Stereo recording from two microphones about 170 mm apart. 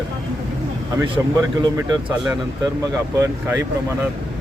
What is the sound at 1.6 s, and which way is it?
Speech, 15° right (ahead or behind).